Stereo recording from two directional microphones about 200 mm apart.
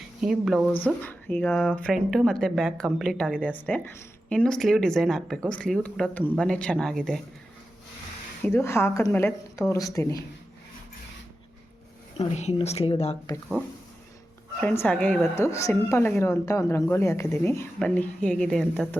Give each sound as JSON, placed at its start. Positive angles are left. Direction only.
{"t": 0.2, "sound": "speech", "side_deg": -5}
{"t": 1.0, "sound": "speech", "side_deg": 10}
{"t": 8.4, "sound": "a woman's voice", "side_deg": 10}
{"t": 12.1, "sound": "speech", "side_deg": 35}
{"t": 14.6, "sound": "a woman's voice", "side_deg": 10}